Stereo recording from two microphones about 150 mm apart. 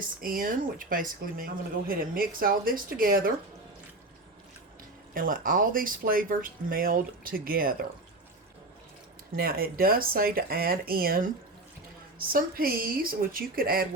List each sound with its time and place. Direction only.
0.0 s a woman's voice: 70° right (ahead or behind)
5.1 s a woman's voice: 65° right (ahead or behind)
9.3 s speech: 85° right
12.3 s a woman's voice: 75° right (ahead or behind)